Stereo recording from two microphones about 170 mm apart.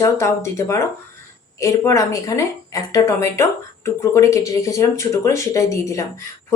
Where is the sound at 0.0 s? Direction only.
15° left (ahead or behind).